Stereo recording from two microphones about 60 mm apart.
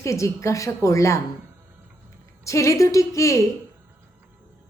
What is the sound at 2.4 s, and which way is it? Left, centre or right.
A woman's voice, left.